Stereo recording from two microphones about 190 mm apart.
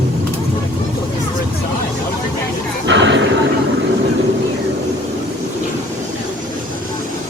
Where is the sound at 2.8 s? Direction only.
75° right (ahead or behind).